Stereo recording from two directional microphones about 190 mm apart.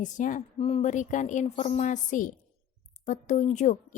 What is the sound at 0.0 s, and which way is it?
A woman's voice, 40° left (ahead or behind).